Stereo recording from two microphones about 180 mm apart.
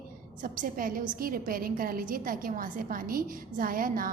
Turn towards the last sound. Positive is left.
turn(degrees=-50)  # may be behind; listen again after turning